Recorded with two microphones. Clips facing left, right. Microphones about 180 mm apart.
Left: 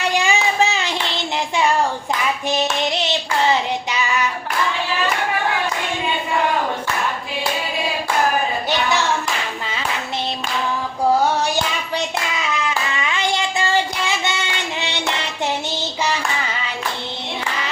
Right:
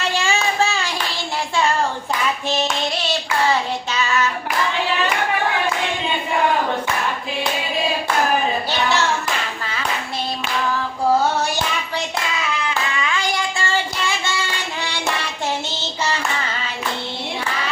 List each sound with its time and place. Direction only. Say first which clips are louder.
0.1 s child singing: left 2 dB; 15° left (ahead or behind)
2.5 s hands: left 4 dB; 20° left (ahead or behind)
13.0 s child singing: left 2 dB; 20° left (ahead or behind)
14.8 s a sound: even; 20° left (ahead or behind)